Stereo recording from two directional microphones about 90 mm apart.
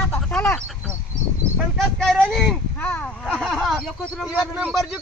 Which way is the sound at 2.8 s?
20° left (ahead or behind).